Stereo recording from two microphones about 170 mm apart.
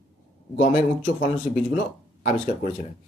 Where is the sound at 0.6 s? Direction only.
50° left (ahead or behind).